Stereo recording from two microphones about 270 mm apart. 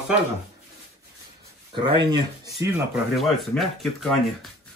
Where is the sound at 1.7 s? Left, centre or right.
Centre.